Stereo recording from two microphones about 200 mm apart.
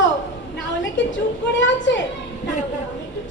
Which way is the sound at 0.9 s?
65° left (ahead or behind).